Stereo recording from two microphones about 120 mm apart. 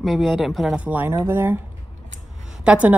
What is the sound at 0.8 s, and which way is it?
Speech, 15° right (ahead or behind).